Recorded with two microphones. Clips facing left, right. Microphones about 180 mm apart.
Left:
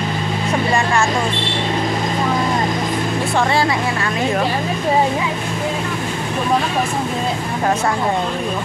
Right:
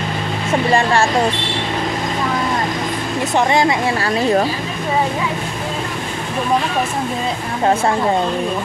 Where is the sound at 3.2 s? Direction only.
20° right (ahead or behind).